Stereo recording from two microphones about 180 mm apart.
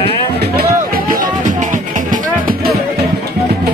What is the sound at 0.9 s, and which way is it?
Music, 45° right (ahead or behind).